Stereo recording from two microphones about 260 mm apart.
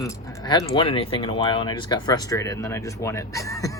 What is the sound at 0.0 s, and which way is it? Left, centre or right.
Speech, centre.